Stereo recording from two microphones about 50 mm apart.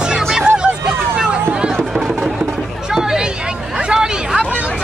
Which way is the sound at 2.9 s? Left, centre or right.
Centre.